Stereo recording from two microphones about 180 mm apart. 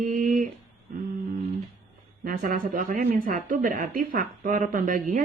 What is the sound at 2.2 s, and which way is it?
Speech, 50° right (ahead or behind).